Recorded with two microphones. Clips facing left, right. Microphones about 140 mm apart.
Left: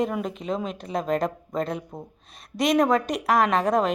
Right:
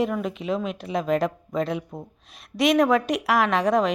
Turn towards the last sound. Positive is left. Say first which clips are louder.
# right 1 dB
turn(degrees=0)  # may be behind; listen again after turning